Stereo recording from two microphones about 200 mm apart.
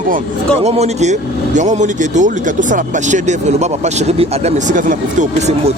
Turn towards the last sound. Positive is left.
turn(degrees=-35)  # may be behind; listen again after turning